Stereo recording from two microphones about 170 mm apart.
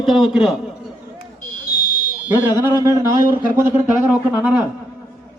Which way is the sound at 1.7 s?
55° left (ahead or behind).